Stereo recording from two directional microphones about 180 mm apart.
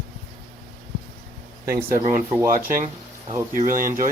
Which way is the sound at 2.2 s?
15° right (ahead or behind).